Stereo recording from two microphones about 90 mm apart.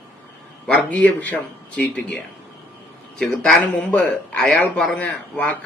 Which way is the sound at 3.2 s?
15° left (ahead or behind).